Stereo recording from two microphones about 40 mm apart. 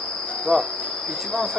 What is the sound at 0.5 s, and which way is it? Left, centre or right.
Cricket, centre.